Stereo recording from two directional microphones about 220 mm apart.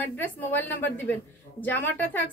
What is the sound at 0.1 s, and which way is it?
A woman's voice, 10° left (ahead or behind).